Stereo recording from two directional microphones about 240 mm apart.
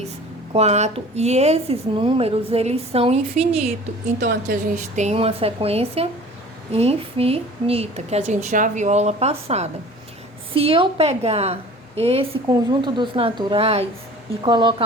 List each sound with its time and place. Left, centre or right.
0.5 s a woman's voice: right
4.2 s speech: right
4.9 s a woman's voice: right